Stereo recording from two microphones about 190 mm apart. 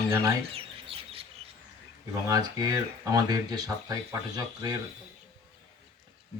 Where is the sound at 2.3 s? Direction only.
20° right (ahead or behind).